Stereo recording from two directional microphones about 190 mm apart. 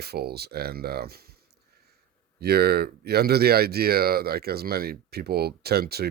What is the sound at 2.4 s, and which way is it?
Speech, 55° right (ahead or behind).